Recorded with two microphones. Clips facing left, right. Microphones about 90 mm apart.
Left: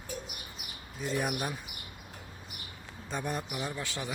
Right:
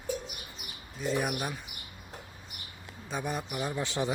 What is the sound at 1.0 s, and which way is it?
Speech, centre (ahead or behind).